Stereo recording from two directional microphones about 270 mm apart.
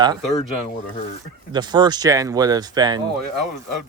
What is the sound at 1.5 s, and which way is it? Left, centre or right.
Speech, centre.